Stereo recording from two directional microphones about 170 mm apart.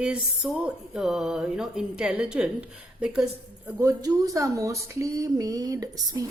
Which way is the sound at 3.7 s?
20° right (ahead or behind).